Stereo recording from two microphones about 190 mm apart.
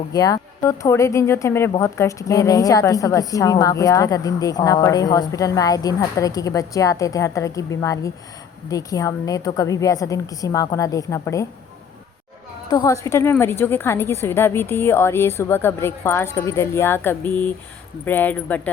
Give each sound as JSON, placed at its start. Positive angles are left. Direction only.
{"t": 0.1, "sound": "a woman's voice", "side_deg": 20}
{"t": 12.7, "sound": "a woman's voice", "side_deg": 15}